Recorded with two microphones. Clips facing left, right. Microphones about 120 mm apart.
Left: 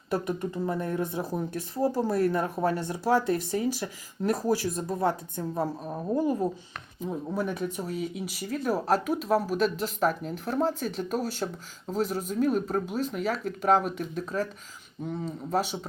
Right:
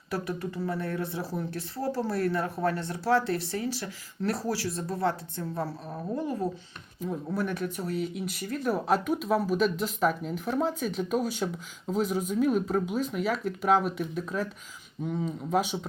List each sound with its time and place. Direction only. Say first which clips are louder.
0.1 s speech: left 3 dB; 20° left (ahead or behind); by 15.9 s 5° left (ahead or behind)